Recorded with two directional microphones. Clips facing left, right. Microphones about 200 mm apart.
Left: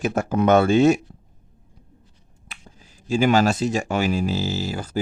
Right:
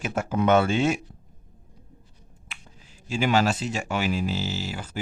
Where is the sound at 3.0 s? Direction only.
40° left (ahead or behind).